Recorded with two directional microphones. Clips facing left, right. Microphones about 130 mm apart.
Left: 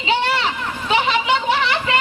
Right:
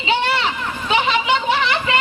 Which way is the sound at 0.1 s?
40° left (ahead or behind).